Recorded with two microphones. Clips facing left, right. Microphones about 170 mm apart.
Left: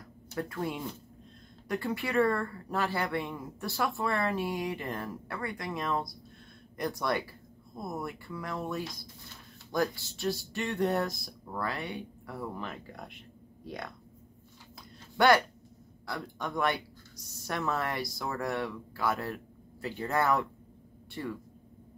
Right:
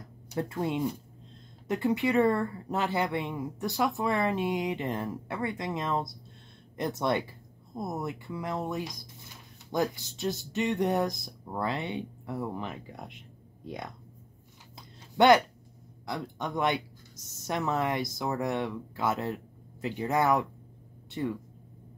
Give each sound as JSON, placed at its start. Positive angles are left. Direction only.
{"t": 0.3, "sound": "speech", "side_deg": -20}
{"t": 14.8, "sound": "a sound", "side_deg": -20}
{"t": 16.1, "sound": "speech", "side_deg": -20}